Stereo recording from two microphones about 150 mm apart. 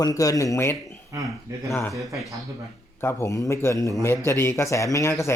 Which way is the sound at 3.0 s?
15° left (ahead or behind).